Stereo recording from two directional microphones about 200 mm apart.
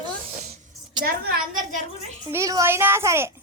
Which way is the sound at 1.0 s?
50° right (ahead or behind).